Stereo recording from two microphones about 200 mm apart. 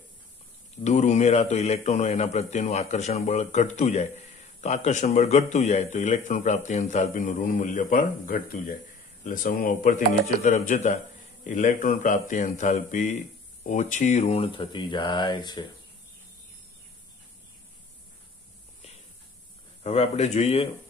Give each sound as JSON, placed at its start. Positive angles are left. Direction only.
{"t": 0.8, "sound": "a man's voice", "side_deg": 35}
{"t": 19.8, "sound": "a man's voice", "side_deg": 30}